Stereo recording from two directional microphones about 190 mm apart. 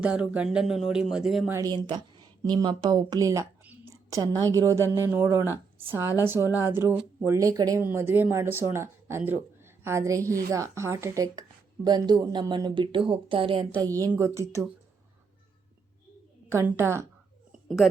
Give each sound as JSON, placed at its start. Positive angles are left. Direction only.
{"t": 0.0, "sound": "speech", "side_deg": -5}
{"t": 1.5, "sound": "a woman's voice", "side_deg": -20}
{"t": 14.1, "sound": "a woman's voice", "side_deg": -15}
{"t": 16.5, "sound": "a woman's voice", "side_deg": -15}